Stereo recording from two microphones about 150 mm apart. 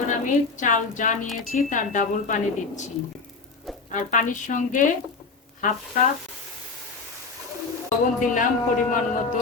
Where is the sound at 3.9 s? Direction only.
55° left (ahead or behind).